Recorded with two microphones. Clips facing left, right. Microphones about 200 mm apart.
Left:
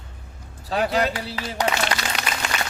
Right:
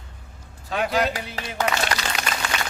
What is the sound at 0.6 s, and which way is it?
A man's voice, 35° left (ahead or behind).